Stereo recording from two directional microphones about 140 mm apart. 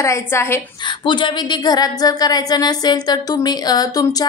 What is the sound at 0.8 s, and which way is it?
Speech, 35° left (ahead or behind).